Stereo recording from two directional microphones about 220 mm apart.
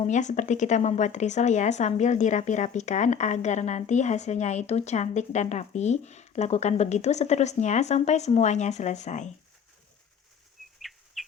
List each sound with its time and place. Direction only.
0.0 s speech: 35° left (ahead or behind)
10.8 s bird flight: centre (ahead or behind)